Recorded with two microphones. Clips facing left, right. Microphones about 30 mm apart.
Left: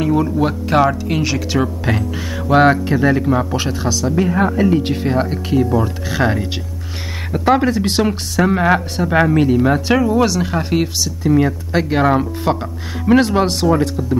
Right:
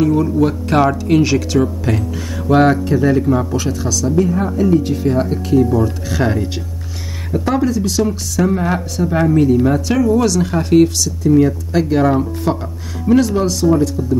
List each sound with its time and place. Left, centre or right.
0.0 s speech: left
0.7 s speech: centre
1.9 s speech: left
5.1 s speech: left
5.9 s speech: centre; by 14.1 s left